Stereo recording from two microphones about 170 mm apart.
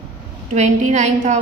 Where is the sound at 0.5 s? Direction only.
45° right (ahead or behind).